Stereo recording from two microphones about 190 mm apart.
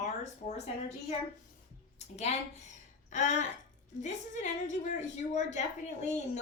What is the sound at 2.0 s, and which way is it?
Speech, 35° left (ahead or behind).